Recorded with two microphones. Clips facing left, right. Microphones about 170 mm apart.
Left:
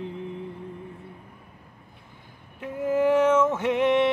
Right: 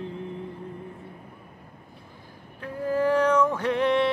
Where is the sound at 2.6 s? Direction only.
20° left (ahead or behind).